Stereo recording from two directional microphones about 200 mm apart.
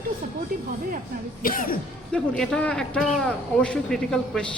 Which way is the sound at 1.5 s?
45° left (ahead or behind).